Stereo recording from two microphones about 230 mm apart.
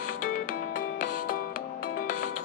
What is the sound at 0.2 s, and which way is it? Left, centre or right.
Music, left.